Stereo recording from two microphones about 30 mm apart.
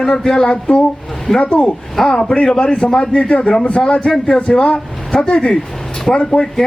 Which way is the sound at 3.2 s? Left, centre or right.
Left.